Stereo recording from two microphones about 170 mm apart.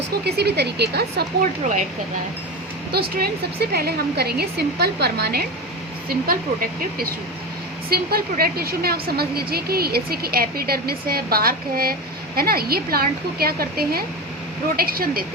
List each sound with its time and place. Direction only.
0.3 s speech: 75° right (ahead or behind)
3.2 s a woman's voice: 65° right (ahead or behind)